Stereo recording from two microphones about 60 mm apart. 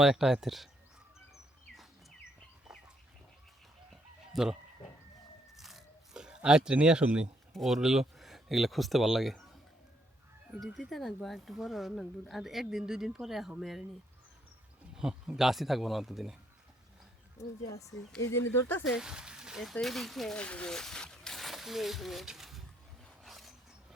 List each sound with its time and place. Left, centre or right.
0.0 s speech: centre
2.7 s chicken: centre
4.3 s speech: centre
5.5 s a sound: centre
7.5 s speech: centre
10.6 s speech: centre
14.9 s speech: centre
17.4 s speech: left
18.9 s speech: centre
20.3 s speech: centre
20.7 s a sound: centre